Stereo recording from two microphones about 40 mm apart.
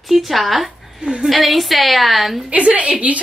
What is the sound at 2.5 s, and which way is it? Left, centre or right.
Speech, right.